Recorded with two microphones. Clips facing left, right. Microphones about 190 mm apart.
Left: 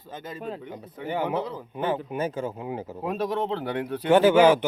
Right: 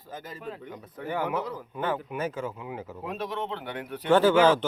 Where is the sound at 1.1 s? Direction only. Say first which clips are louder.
Left 2 dB; 25° left (ahead or behind).